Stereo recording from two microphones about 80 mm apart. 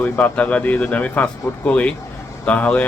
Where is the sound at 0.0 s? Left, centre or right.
Centre.